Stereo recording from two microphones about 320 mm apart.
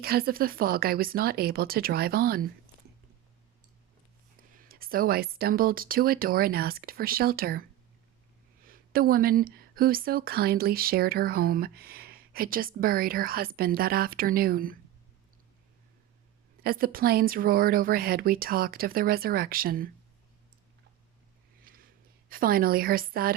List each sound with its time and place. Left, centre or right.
0.0 s speech: right
4.5 s speech: right
8.6 s speech: right
16.6 s speech: right
22.3 s speech: right